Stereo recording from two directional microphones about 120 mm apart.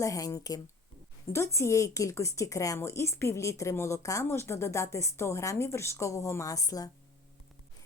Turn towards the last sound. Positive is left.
turn(degrees=30)  # may be behind; listen again after turning